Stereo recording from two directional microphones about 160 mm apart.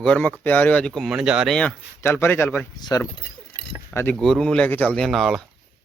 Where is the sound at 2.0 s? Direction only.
15° left (ahead or behind).